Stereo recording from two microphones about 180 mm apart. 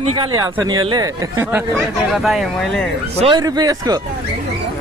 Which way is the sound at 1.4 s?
10° right (ahead or behind).